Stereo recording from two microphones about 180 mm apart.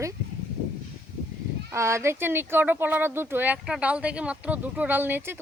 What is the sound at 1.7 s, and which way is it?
Speech, 15° right (ahead or behind).